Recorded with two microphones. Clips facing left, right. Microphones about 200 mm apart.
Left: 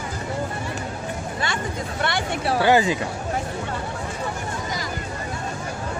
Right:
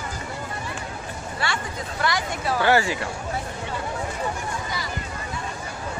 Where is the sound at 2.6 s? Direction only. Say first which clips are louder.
Left 3 dB; 15° left (ahead or behind).